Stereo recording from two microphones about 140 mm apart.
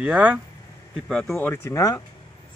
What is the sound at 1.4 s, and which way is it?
Speech, 15° left (ahead or behind).